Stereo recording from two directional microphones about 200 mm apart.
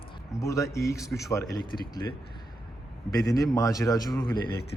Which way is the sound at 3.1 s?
15° left (ahead or behind).